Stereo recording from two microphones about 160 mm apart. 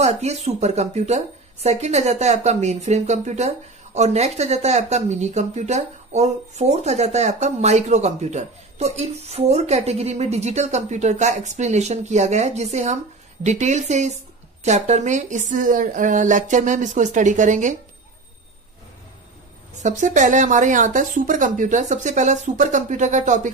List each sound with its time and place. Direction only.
0.0 s speech: 45° right (ahead or behind)
19.8 s speech: 50° right (ahead or behind)